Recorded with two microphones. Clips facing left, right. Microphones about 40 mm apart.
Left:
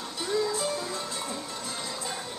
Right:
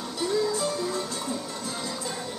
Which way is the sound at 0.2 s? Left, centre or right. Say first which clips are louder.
Right 2 dB; centre.